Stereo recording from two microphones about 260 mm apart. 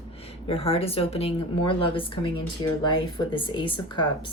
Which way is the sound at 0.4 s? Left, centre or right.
Left.